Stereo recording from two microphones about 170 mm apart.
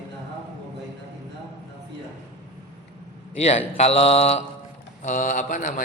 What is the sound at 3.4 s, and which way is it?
A man's voice, 40° left (ahead or behind).